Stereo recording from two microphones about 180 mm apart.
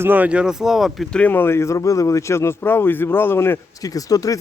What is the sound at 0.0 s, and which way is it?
Speech, 10° right (ahead or behind).